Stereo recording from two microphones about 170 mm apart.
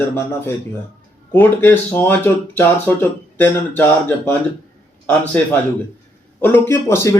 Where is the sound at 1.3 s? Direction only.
10° left (ahead or behind).